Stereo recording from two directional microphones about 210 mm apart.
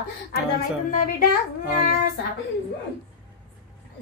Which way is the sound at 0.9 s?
40° left (ahead or behind).